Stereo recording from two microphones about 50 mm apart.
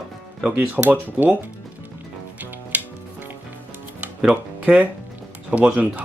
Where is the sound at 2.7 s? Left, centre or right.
Right.